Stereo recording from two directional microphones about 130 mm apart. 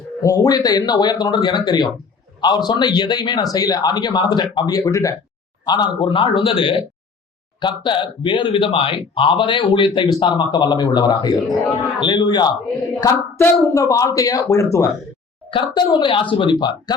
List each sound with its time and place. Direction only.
0.2 s speech: 25° left (ahead or behind)
5.6 s speech: 35° left (ahead or behind)
15.4 s a woman's voice: 40° left (ahead or behind)